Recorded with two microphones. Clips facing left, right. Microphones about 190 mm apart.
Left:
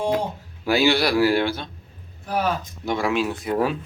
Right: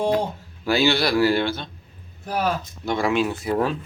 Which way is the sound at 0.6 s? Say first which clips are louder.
Left 1 dB; 10° left (ahead or behind).